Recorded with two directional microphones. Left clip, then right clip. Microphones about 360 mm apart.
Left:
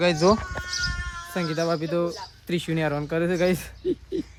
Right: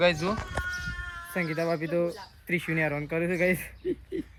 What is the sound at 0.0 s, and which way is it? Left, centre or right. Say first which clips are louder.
Speech: left 5 dB; centre.